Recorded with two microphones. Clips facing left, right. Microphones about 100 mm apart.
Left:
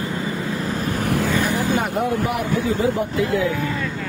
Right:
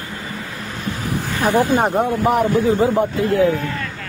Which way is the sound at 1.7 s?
35° right (ahead or behind).